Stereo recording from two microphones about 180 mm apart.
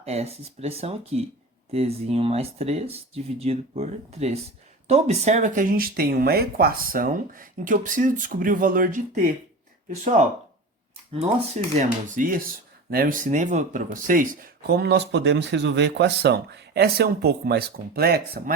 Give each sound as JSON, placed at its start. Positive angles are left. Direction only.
{"t": 0.0, "sound": "speech", "side_deg": -35}
{"t": 14.7, "sound": "speech", "side_deg": -65}